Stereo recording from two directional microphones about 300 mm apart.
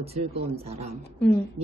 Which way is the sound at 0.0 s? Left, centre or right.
Centre.